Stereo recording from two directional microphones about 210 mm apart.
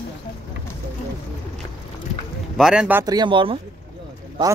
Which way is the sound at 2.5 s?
Centre (ahead or behind).